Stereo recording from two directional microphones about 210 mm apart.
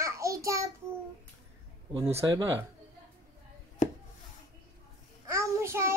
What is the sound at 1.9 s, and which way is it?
Speech, 25° right (ahead or behind).